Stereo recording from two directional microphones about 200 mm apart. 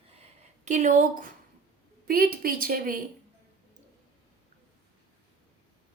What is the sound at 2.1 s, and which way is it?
Speech, 45° right (ahead or behind).